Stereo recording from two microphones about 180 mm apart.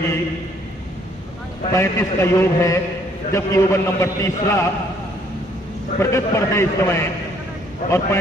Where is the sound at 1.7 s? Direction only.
15° left (ahead or behind).